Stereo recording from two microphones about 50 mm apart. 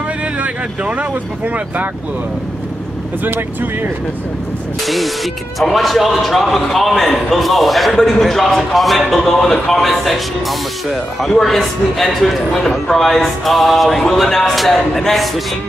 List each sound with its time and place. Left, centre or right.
0.4 s speech: right
3.3 s speech: right
4.8 s a man's voice: centre